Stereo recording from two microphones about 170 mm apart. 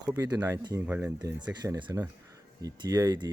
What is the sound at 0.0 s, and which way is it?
Speech, 20° right (ahead or behind).